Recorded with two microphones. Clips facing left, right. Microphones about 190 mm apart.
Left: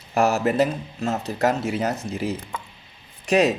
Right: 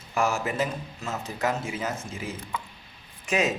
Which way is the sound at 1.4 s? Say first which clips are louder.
Left 6 dB; 70° left (ahead or behind).